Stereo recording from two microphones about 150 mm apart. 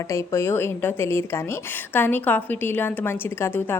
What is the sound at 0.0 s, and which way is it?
A woman's voice, 20° left (ahead or behind).